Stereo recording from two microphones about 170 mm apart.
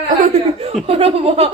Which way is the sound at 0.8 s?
35° right (ahead or behind).